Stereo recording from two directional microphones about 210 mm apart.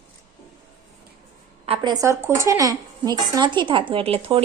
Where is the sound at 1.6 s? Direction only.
25° right (ahead or behind).